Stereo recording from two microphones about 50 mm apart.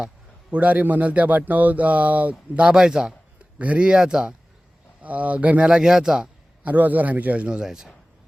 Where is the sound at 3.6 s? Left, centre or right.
Right.